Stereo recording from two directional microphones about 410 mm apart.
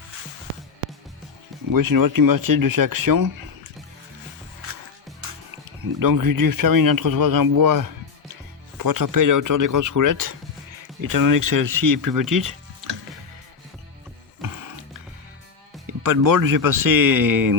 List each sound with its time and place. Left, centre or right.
1.7 s speech: right
5.8 s speech: right
14.4 s music: right
15.9 s speech: right